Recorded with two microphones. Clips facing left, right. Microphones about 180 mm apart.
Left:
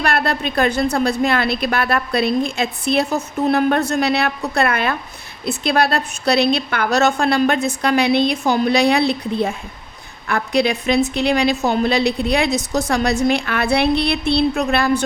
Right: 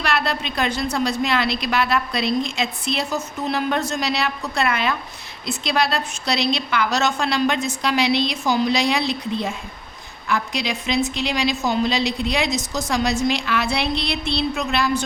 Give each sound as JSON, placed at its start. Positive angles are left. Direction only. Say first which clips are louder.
{"t": 0.0, "sound": "a woman's voice", "louder": "left 4 dB", "side_deg": 50}